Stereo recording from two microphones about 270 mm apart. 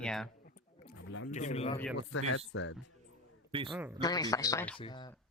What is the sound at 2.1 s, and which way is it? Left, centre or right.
Speech, left.